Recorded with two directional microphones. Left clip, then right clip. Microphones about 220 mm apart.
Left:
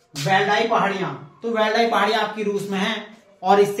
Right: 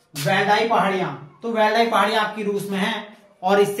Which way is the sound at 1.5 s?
Centre (ahead or behind).